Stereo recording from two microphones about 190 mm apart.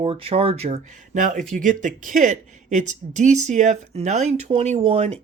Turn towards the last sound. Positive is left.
turn(degrees=-30)  # may be behind; listen again after turning